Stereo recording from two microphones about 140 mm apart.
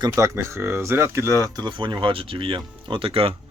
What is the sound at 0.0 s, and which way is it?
Speech, 20° right (ahead or behind).